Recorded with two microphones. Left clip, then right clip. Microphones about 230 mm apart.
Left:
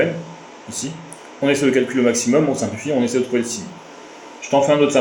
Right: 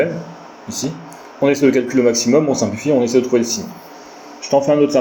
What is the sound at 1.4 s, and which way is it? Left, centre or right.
Speech, right.